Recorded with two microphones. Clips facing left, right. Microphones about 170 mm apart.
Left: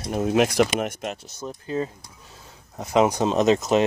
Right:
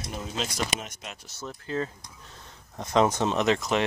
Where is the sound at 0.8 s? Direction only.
55° left (ahead or behind).